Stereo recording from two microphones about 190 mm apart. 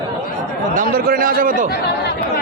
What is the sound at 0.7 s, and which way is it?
Speech, 50° right (ahead or behind).